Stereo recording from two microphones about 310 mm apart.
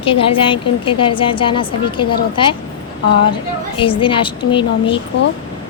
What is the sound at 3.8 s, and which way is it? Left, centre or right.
A woman's voice, centre.